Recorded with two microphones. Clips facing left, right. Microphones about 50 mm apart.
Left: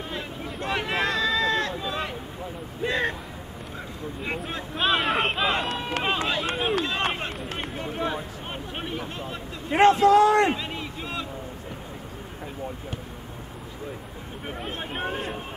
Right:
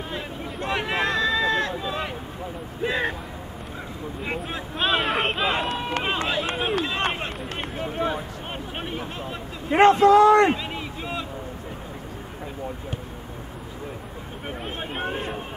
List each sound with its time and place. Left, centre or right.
0.1 s a sound: centre
2.8 s speech: centre
4.2 s speech: centre
10.0 s a man's voice: right
10.3 s a sound: centre
14.6 s speech: centre